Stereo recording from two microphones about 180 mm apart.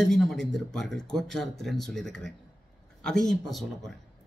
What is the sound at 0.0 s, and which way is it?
Speech, centre (ahead or behind).